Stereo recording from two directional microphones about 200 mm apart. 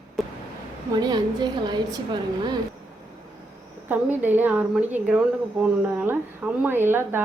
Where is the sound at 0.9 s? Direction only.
20° right (ahead or behind).